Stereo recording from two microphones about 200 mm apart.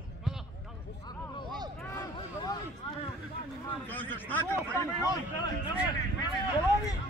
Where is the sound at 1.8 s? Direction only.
15° left (ahead or behind).